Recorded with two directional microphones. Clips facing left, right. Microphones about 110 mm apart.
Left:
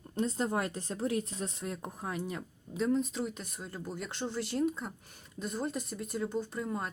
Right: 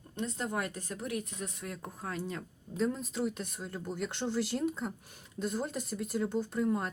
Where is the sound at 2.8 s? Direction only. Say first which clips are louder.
Left 2 dB; centre (ahead or behind).